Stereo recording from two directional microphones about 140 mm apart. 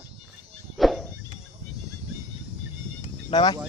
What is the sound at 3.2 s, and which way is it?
Speech, 35° left (ahead or behind).